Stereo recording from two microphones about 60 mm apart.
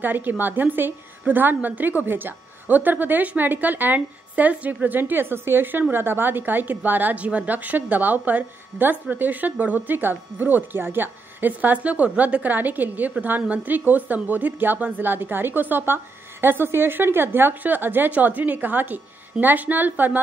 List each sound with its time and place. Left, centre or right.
0.0 s a woman's voice: right